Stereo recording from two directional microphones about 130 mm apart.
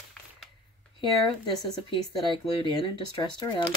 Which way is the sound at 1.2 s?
35° left (ahead or behind).